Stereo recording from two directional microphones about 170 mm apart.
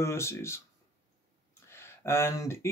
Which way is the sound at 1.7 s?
15° left (ahead or behind).